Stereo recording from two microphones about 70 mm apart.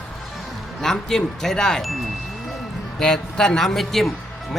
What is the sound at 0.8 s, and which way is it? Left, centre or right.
Speech, centre.